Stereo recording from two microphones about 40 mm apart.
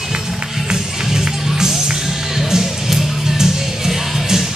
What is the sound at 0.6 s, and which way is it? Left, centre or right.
Music, centre.